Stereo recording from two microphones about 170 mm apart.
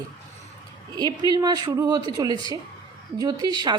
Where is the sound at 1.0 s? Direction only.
25° right (ahead or behind).